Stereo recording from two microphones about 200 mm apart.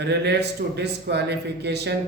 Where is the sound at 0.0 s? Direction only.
55° right (ahead or behind).